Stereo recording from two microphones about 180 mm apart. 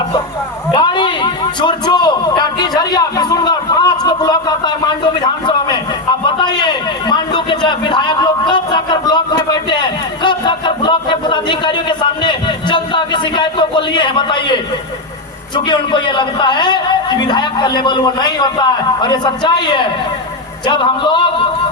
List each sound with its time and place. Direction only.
0.7 s a man's voice: 25° left (ahead or behind)
15.5 s a man's voice: 25° left (ahead or behind)